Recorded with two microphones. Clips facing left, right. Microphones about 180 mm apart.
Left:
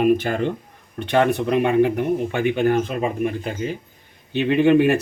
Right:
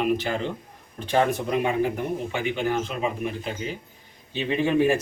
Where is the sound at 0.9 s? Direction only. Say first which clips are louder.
Left 4 dB; 65° left (ahead or behind); by 3.5 s 50° left (ahead or behind).